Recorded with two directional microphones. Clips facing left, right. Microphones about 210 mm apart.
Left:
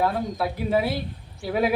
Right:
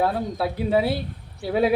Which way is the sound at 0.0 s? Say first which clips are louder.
Right 1 dB; 30° right (ahead or behind).